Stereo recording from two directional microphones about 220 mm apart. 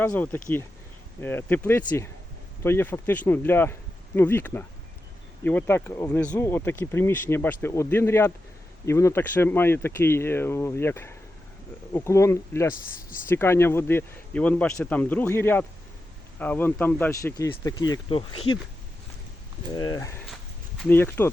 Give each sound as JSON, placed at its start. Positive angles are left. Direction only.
{"t": 0.0, "sound": "speech", "side_deg": 10}
{"t": 19.7, "sound": "speech", "side_deg": 15}